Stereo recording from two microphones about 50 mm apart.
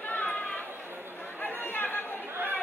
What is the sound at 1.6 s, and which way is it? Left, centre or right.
Chatter, left.